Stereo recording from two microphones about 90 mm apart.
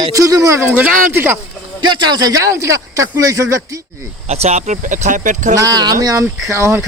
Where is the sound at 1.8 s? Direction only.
55° right (ahead or behind).